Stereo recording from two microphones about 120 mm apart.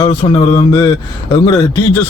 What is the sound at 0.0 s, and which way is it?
Speech, 50° left (ahead or behind).